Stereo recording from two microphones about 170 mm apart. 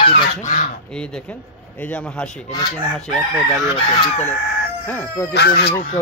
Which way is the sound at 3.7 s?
40° left (ahead or behind).